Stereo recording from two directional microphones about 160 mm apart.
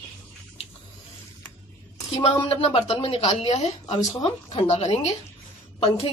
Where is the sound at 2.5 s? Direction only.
35° left (ahead or behind).